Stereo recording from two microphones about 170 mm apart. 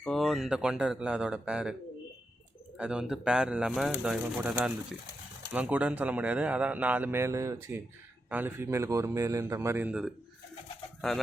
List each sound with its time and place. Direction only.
0.0 s speech: centre (ahead or behind)
2.7 s a man's voice: 5° right (ahead or behind)